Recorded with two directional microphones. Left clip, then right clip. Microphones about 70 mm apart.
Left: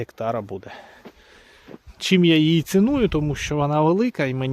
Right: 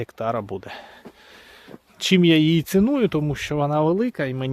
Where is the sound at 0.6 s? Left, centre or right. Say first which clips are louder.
Right 2 dB; right.